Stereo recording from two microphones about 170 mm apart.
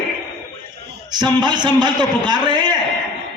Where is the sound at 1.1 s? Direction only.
25° right (ahead or behind).